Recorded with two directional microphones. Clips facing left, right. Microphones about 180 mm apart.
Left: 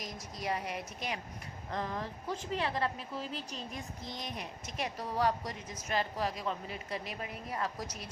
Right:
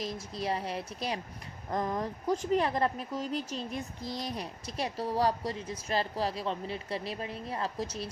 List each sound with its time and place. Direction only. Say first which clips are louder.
0.0 s a woman's voice: right 5 dB; 30° right (ahead or behind)